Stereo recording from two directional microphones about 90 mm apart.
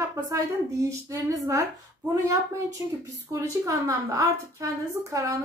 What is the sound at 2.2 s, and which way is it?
A woman's voice, 35° right (ahead or behind).